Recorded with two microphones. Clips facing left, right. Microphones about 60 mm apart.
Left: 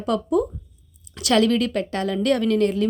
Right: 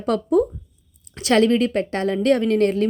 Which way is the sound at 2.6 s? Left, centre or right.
Right.